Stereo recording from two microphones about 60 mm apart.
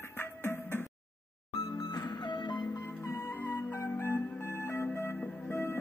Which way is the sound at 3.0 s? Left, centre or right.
Left.